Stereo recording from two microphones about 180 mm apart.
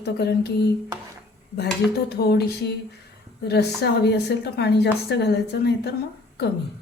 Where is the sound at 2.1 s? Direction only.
65° left (ahead or behind).